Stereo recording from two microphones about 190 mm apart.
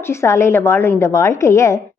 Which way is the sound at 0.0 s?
15° left (ahead or behind).